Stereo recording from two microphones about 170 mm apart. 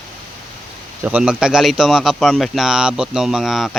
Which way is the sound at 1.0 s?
5° right (ahead or behind).